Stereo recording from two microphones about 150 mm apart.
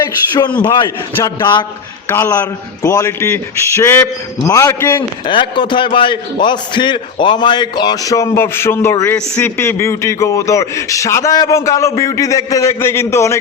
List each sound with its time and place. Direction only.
0.0 s a man's voice: 25° left (ahead or behind)
2.0 s a man's voice: 15° left (ahead or behind)
5.2 s a man's voice: 35° left (ahead or behind); by 9.1 s 15° left (ahead or behind)
9.1 s a man's voice: 5° left (ahead or behind)
9.6 s speech: 15° left (ahead or behind)